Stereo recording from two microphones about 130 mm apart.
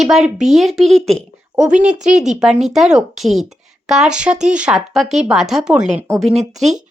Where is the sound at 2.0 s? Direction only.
65° right (ahead or behind).